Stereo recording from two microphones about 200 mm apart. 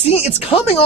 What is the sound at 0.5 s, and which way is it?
Speech, 25° left (ahead or behind).